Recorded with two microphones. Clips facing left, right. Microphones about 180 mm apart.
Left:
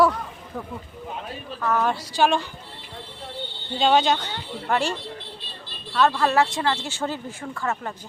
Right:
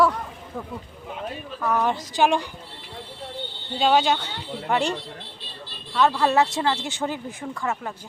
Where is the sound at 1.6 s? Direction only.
15° right (ahead or behind).